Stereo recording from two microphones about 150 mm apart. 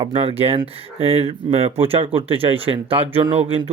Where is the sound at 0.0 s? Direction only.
35° right (ahead or behind).